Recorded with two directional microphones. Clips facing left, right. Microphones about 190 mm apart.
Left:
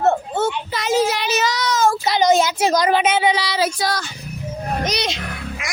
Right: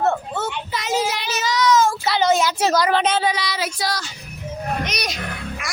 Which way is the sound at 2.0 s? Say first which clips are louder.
Left 2 dB; 15° left (ahead or behind).